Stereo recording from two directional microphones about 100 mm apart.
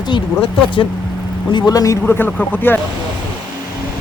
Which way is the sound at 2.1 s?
20° left (ahead or behind).